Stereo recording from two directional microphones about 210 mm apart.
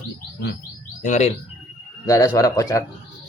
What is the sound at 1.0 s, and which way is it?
Speech, 35° left (ahead or behind).